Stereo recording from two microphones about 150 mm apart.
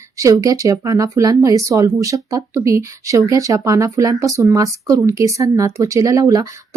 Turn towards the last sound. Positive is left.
turn(degrees=-25)  # may be behind; listen again after turning